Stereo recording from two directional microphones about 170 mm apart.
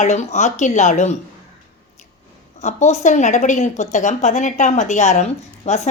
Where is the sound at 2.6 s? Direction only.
40° left (ahead or behind).